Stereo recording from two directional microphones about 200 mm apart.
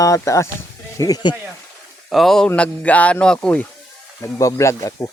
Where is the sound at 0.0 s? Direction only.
15° left (ahead or behind).